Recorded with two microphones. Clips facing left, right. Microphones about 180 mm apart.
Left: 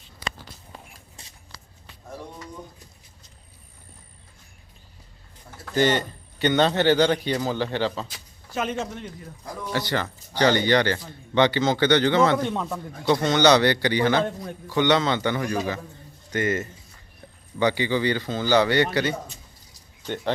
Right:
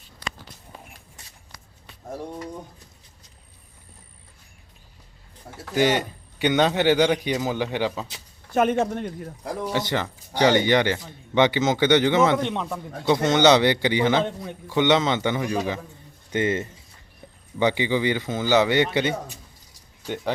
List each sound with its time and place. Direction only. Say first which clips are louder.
0.2 s a sound: left 1 dB; 5° left (ahead or behind)
5.7 s a man's voice: even; 10° right (ahead or behind)
8.5 s a man's voice: right 7 dB; 60° right (ahead or behind)
9.7 s a man's voice: left 2 dB; 20° right (ahead or behind)
14.3 s a man's voice: even; centre (ahead or behind)
14.7 s a man's voice: right 1 dB; 20° right (ahead or behind)